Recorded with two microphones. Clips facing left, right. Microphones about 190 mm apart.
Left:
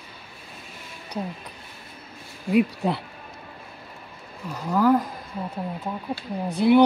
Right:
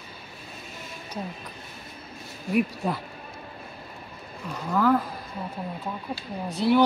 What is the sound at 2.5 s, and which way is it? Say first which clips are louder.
Speech: left 4 dB; 15° left (ahead or behind).